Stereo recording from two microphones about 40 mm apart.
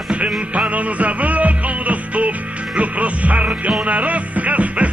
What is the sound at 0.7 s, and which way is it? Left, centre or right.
Music, right.